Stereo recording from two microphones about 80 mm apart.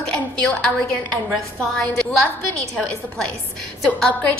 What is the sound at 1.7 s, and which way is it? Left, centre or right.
Speech, centre.